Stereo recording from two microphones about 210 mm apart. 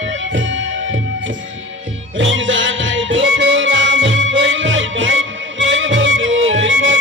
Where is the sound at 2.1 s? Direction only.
65° right (ahead or behind).